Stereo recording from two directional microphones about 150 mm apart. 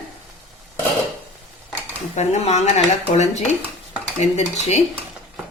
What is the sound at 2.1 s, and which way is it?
Speech, 50° left (ahead or behind).